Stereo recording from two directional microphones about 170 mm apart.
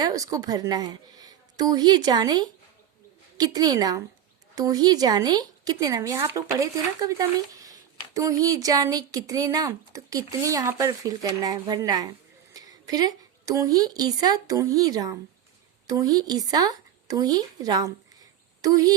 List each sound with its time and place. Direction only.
0.0 s a woman's voice: 20° right (ahead or behind)